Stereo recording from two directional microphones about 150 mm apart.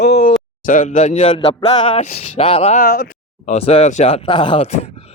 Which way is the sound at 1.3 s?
35° left (ahead or behind).